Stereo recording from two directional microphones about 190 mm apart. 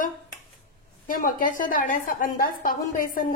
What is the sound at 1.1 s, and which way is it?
A woman's voice, 45° left (ahead or behind).